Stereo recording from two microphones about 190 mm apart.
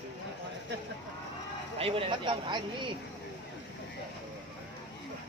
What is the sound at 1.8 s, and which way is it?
Speech, 30° right (ahead or behind).